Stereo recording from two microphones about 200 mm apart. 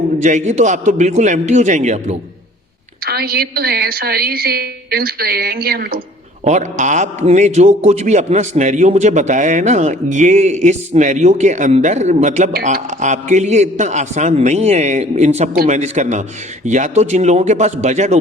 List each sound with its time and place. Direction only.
0.2 s a man's voice: 35° right (ahead or behind)
3.1 s a woman's voice: 50° right (ahead or behind)
6.4 s a man's voice: 35° right (ahead or behind)